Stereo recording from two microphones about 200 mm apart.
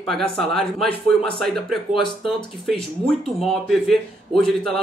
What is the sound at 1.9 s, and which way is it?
Speech, 25° left (ahead or behind).